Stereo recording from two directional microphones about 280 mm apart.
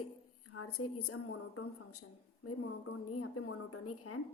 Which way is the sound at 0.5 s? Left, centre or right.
Left.